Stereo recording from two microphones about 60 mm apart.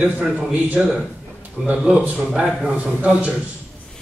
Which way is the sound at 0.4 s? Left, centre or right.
Right.